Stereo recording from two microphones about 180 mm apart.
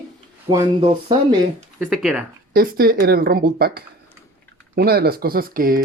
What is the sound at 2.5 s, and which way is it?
Speech, 55° right (ahead or behind).